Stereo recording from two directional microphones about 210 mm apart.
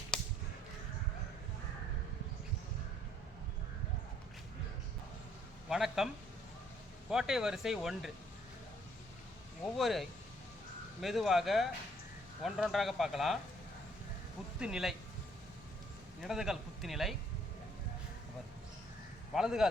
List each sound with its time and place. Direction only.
0.1 s whip: 5° left (ahead or behind)
5.6 s a man's voice: centre (ahead or behind)
7.1 s speech: 5° right (ahead or behind)
9.7 s speech: centre (ahead or behind)
14.6 s speech: centre (ahead or behind)
16.2 s speech: centre (ahead or behind)
19.3 s speech: centre (ahead or behind)